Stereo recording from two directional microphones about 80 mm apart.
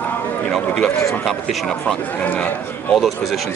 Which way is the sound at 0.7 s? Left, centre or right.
Centre.